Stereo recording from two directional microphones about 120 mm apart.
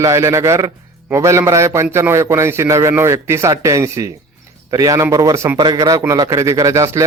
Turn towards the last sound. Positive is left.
turn(degrees=-25)  # may be behind; listen again after turning